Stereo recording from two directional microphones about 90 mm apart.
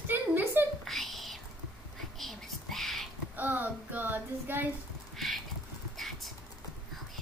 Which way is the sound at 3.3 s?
20° right (ahead or behind).